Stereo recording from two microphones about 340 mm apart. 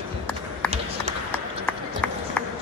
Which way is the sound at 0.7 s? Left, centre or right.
Centre.